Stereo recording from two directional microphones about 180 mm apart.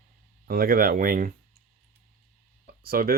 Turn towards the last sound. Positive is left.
turn(degrees=-55)  # may be behind; listen again after turning